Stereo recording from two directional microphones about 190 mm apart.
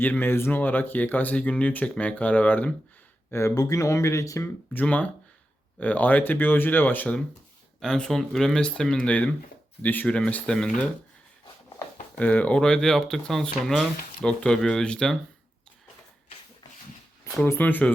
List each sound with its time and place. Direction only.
0.0 s speech: 10° left (ahead or behind)
12.1 s speech: 10° left (ahead or behind)
17.3 s speech: 10° left (ahead or behind)